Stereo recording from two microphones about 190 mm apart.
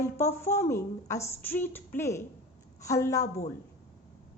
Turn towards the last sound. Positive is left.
turn(degrees=15)  # may be behind; listen again after turning